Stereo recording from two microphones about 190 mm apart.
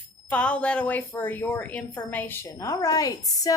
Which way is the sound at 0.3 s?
5° left (ahead or behind).